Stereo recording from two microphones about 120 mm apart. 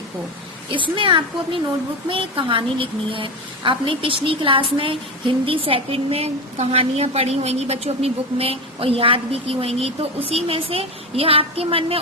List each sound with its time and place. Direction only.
0.7 s a woman's voice: 45° right (ahead or behind)